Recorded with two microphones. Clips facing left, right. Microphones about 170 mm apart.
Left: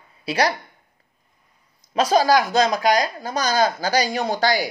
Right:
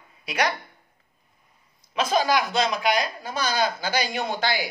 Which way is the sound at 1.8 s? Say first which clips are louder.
Left 5 dB; 40° left (ahead or behind).